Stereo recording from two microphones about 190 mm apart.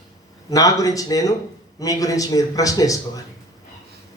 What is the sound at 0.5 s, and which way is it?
Speech, 20° left (ahead or behind).